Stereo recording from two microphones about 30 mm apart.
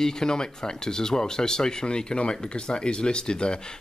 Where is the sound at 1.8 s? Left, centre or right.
Left.